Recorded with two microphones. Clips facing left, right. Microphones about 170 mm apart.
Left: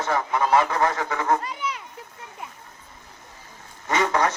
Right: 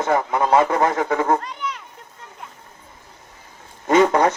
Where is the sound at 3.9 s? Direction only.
55° right (ahead or behind).